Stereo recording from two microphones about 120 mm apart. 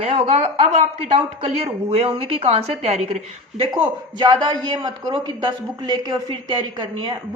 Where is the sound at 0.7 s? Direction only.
75° right (ahead or behind).